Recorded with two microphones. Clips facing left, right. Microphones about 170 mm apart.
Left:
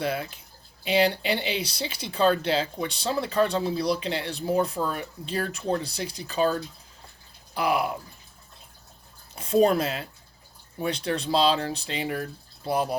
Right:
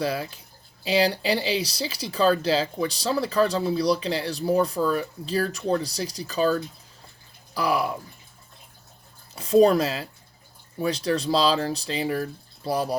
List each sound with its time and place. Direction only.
0.0 s speech: 35° right (ahead or behind)
7.5 s speech: 35° right (ahead or behind)
9.5 s speech: 35° right (ahead or behind)